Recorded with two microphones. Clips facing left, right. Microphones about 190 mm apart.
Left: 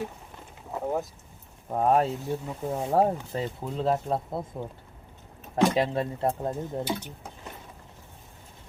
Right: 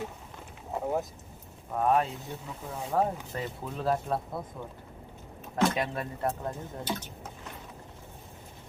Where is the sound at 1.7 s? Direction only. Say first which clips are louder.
Left 3 dB; 35° left (ahead or behind).